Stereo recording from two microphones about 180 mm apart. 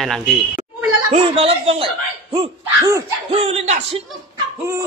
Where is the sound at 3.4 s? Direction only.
35° right (ahead or behind).